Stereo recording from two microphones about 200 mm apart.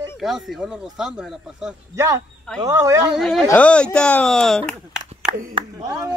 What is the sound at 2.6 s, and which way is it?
Speech, 15° right (ahead or behind).